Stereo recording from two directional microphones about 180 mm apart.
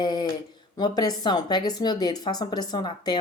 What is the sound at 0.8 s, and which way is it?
Speech, 20° left (ahead or behind).